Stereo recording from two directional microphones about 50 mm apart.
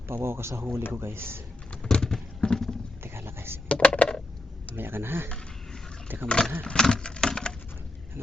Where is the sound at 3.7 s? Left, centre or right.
Left.